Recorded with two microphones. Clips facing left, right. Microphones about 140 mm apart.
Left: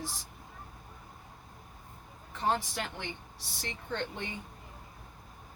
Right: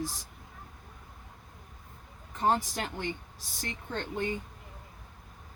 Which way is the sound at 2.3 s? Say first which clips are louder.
Right 3 dB; 45° right (ahead or behind).